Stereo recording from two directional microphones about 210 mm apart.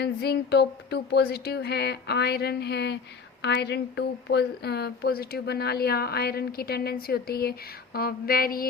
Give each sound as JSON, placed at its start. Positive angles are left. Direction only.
{"t": 0.0, "sound": "a woman's voice", "side_deg": 50}